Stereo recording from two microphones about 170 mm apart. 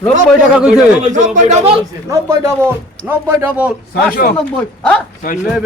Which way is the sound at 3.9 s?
55° left (ahead or behind).